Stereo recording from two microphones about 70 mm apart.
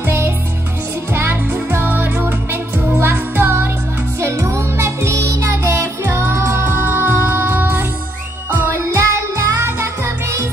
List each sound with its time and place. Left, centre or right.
1.1 s music: right
4.2 s music: right
6.0 s music: right